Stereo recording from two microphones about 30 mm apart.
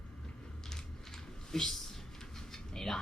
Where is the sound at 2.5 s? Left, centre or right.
Centre.